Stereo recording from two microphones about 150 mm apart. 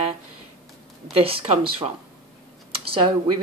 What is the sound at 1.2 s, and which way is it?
Speech, 40° right (ahead or behind).